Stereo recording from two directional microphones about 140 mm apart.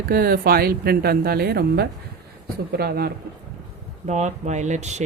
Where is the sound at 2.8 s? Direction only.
90° right.